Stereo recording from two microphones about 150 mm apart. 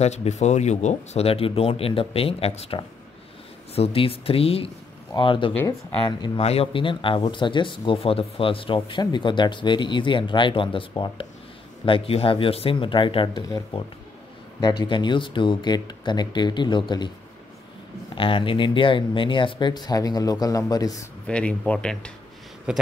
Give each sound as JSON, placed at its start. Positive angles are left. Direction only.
{"t": 0.0, "sound": "speech", "side_deg": 45}
{"t": 6.4, "sound": "speech", "side_deg": 40}
{"t": 18.1, "sound": "speech", "side_deg": 35}
{"t": 21.3, "sound": "speech", "side_deg": 5}
{"t": 22.7, "sound": "speech", "side_deg": -5}